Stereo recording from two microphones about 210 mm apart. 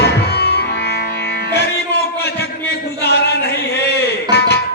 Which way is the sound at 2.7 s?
50° left (ahead or behind).